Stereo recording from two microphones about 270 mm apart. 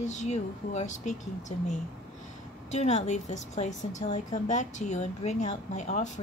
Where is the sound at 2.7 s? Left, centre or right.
Left.